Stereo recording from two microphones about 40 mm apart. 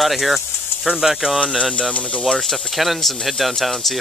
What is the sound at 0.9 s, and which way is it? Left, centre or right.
Speech, centre.